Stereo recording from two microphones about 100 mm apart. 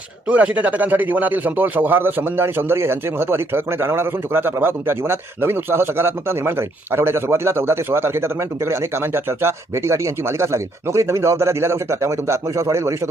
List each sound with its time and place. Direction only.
0.3 s speech: 15° right (ahead or behind)